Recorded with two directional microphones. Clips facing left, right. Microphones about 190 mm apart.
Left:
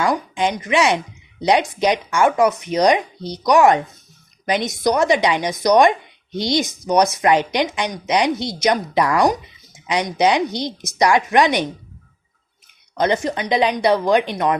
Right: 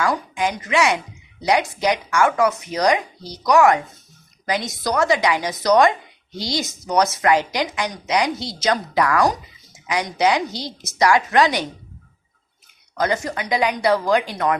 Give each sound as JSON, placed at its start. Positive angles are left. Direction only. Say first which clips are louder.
{"t": 0.0, "sound": "speech", "louder": "left 2 dB", "side_deg": 20}
{"t": 13.0, "sound": "speech", "louder": "left 3 dB", "side_deg": 20}